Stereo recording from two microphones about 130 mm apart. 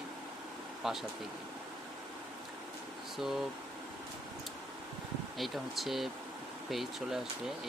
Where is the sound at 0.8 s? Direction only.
Centre (ahead or behind).